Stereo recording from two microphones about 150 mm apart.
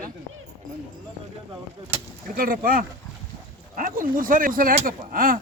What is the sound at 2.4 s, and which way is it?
Speech, 70° right (ahead or behind).